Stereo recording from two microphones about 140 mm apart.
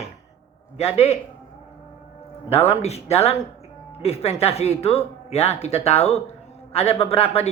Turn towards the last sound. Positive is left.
turn(degrees=45)  # may be behind; listen again after turning